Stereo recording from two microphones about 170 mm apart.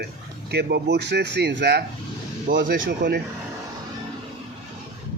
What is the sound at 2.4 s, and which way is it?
Speech, 55° right (ahead or behind).